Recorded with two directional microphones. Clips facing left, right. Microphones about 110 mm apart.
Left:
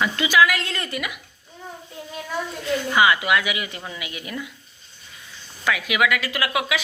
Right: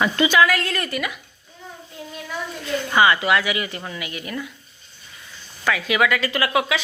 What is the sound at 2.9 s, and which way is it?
A woman's voice, 10° left (ahead or behind).